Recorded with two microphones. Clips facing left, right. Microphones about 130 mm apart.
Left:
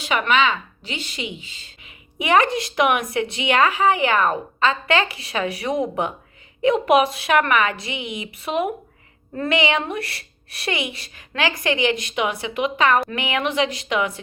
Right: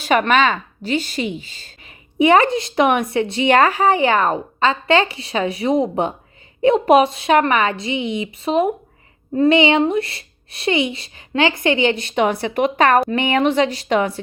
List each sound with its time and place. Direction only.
0.0 s a woman's voice: 45° right (ahead or behind)
2.1 s a woman's voice: 30° right (ahead or behind); by 13.0 s 45° right (ahead or behind)
13.1 s speech: 35° right (ahead or behind)